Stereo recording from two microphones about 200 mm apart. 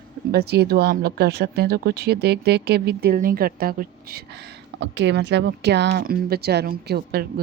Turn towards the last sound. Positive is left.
turn(degrees=-50)  # may be behind; listen again after turning